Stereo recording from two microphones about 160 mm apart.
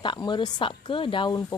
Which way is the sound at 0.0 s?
30° left (ahead or behind).